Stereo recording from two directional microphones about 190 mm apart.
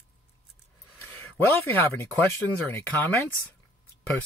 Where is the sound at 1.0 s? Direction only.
10° left (ahead or behind).